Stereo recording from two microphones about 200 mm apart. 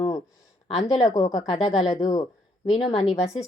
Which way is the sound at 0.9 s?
20° left (ahead or behind).